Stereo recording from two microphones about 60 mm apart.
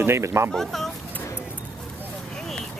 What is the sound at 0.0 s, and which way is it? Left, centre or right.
Speech, right.